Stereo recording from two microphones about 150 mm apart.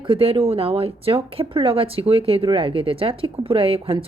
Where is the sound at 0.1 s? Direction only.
40° right (ahead or behind).